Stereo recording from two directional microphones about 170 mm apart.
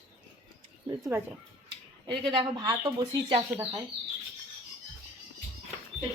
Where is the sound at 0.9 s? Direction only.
20° right (ahead or behind).